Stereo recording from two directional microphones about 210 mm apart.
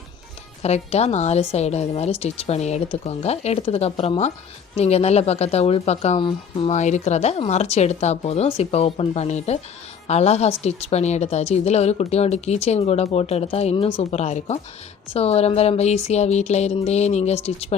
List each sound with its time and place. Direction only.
0.6 s a woman's voice: 30° left (ahead or behind)